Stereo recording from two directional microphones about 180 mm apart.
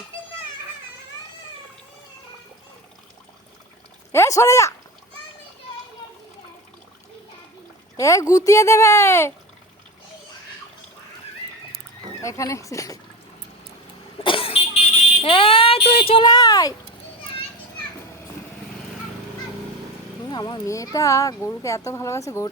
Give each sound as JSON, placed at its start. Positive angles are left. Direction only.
{"t": 4.1, "sound": "speech", "side_deg": 15}
{"t": 7.9, "sound": "speech", "side_deg": 20}
{"t": 12.2, "sound": "speech", "side_deg": 15}
{"t": 14.3, "sound": "vehicle", "side_deg": 30}
{"t": 15.2, "sound": "speech", "side_deg": 30}
{"t": 20.3, "sound": "speech", "side_deg": 25}